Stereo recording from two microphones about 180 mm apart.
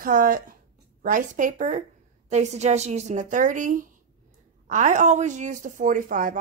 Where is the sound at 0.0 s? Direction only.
50° right (ahead or behind).